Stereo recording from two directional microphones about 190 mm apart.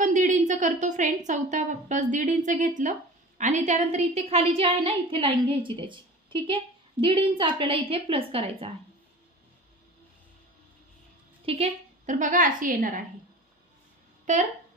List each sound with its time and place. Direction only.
0.0 s a woman's voice: 40° right (ahead or behind)
11.4 s a woman's voice: 30° right (ahead or behind)
14.3 s a woman's voice: 40° right (ahead or behind)